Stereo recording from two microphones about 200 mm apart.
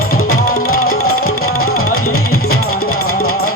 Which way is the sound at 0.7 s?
90° left.